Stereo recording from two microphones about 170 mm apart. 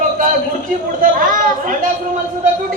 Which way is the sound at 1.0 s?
50° right (ahead or behind).